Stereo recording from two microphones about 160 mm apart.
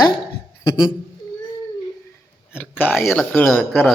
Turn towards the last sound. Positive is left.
turn(degrees=5)  # may be behind; listen again after turning